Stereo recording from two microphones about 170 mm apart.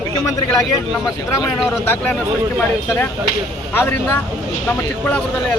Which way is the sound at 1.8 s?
15° left (ahead or behind).